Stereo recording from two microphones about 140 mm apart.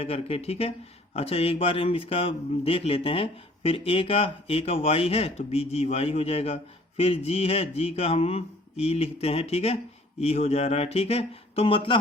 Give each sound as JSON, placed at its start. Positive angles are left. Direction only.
{"t": 0.0, "sound": "speech", "side_deg": 45}